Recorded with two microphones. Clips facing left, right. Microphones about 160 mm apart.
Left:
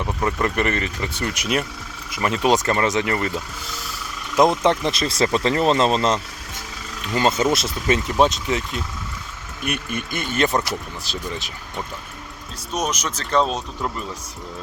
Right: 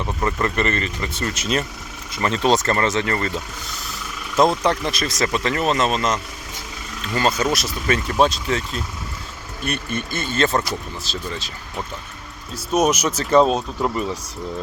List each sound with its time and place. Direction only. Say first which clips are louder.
0.1 s speech: even; 5° left (ahead or behind); by 6.1 s 30° left (ahead or behind)
7.0 s speech: left 1 dB; 15° left (ahead or behind)
12.7 s speech: right 7 dB; 10° right (ahead or behind)